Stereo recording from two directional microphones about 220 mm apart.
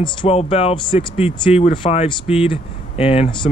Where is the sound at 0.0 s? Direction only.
20° left (ahead or behind).